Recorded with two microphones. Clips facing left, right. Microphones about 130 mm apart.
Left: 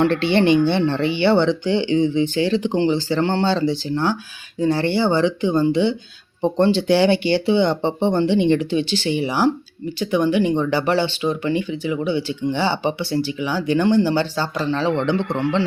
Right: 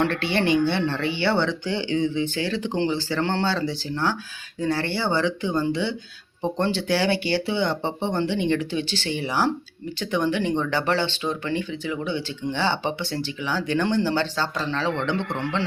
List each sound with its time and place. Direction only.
0.0 s speech: 25° left (ahead or behind)